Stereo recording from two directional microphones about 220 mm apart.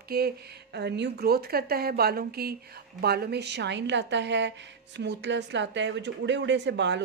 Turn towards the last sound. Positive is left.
turn(degrees=-55)  # may be behind; listen again after turning